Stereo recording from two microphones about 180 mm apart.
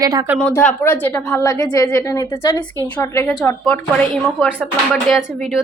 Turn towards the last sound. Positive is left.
turn(degrees=-5)  # may be behind; listen again after turning